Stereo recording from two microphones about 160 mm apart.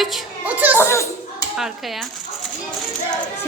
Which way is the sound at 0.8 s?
15° left (ahead or behind).